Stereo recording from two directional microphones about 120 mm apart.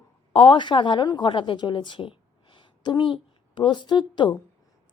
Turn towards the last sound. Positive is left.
turn(degrees=40)  # may be behind; listen again after turning